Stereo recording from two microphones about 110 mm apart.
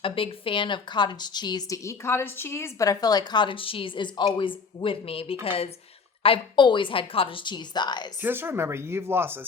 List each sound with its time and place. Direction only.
0.0 s a woman's voice: 55° left (ahead or behind)
8.2 s speech: 20° right (ahead or behind)